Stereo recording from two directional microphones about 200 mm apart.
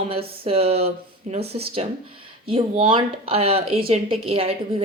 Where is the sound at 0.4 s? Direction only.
30° right (ahead or behind).